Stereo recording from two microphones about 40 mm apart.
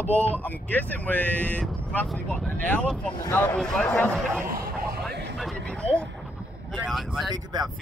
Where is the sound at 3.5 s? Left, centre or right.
Centre.